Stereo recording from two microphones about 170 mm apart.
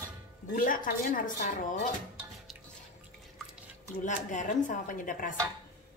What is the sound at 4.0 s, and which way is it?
Speech, 50° left (ahead or behind).